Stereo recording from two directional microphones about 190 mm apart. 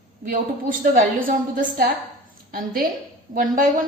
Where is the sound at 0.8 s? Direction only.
45° right (ahead or behind).